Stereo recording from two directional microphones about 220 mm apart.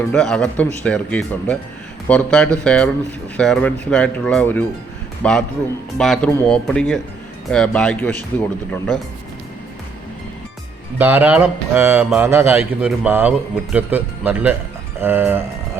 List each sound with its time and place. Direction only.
0.1 s speech: centre (ahead or behind)
10.9 s speech: 10° right (ahead or behind)